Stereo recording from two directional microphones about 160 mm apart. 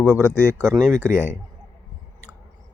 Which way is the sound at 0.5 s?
15° right (ahead or behind).